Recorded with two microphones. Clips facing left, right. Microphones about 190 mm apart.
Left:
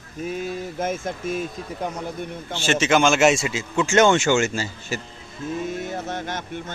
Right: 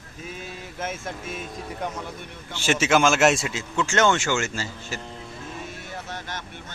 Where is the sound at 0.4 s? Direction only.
40° left (ahead or behind).